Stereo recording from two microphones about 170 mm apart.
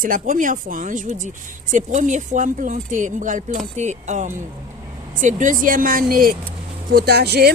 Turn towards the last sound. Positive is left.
turn(degrees=-70)  # may be behind; listen again after turning